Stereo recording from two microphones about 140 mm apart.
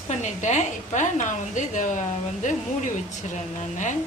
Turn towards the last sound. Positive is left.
turn(degrees=60)  # may be behind; listen again after turning